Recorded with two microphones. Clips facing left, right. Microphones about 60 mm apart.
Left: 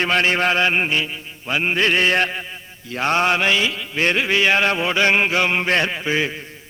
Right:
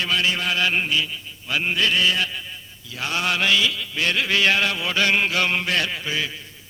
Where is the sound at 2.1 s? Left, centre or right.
Left.